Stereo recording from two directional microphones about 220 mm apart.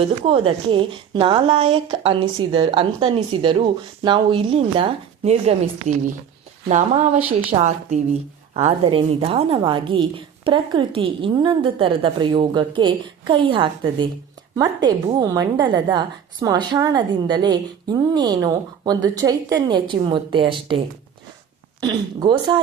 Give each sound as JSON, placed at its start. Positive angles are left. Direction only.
{"t": 0.0, "sound": "a woman's voice", "side_deg": -25}
{"t": 6.7, "sound": "a woman's voice", "side_deg": -35}